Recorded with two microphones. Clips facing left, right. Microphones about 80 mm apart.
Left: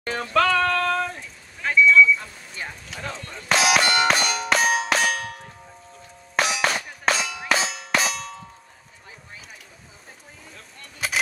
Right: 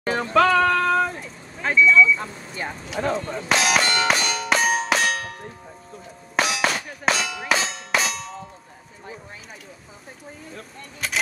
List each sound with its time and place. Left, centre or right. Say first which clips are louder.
0.0 s music: right 3 dB; centre
1.1 s a sound: right 4 dB; right
2.0 s vehicle: right 1 dB; right
3.0 s speech: right 10 dB; right
3.4 s clang: left 1 dB; centre
11.0 s keys jangling: left 1 dB; centre